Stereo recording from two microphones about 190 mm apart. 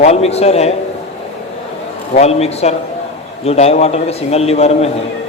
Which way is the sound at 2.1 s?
35° left (ahead or behind).